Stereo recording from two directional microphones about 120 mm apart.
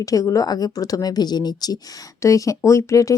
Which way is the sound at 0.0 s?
30° left (ahead or behind).